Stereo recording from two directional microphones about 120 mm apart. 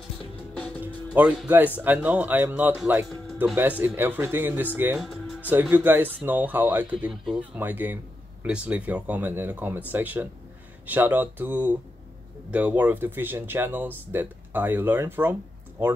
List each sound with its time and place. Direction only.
0.7 s music: 5° right (ahead or behind)
1.8 s speech: 15° right (ahead or behind)
4.9 s music: centre (ahead or behind)
5.4 s speech: 15° right (ahead or behind)
7.5 s speech: 15° right (ahead or behind)